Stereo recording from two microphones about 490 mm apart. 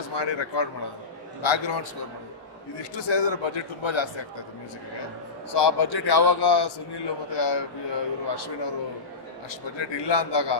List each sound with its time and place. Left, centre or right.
0.1 s speech: left
5.5 s a man's voice: left
9.8 s speech: left